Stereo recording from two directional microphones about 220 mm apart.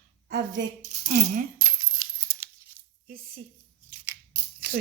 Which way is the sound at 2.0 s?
10° right (ahead or behind).